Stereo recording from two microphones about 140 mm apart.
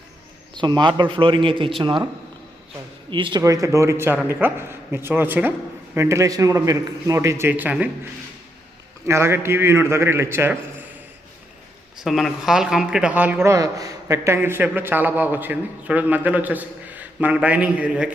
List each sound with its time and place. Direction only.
0.5 s a man's voice: 35° right (ahead or behind)
3.1 s a man's voice: 35° right (ahead or behind)
3.4 s speech: 20° right (ahead or behind)
9.0 s speech: 20° right (ahead or behind)
11.9 s speech: centre (ahead or behind)